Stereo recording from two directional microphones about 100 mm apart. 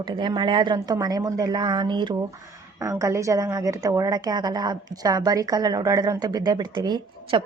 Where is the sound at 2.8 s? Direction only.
30° right (ahead or behind).